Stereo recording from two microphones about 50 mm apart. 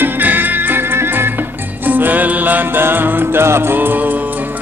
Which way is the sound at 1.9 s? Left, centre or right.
Right.